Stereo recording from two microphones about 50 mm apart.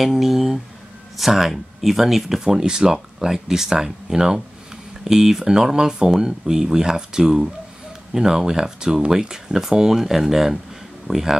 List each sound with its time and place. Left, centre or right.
0.0 s speech: centre